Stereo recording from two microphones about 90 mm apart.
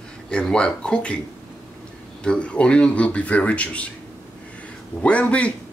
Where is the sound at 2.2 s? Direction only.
10° left (ahead or behind).